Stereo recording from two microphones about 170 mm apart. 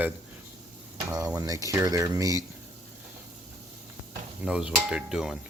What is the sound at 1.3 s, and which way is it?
Speech, 20° right (ahead or behind).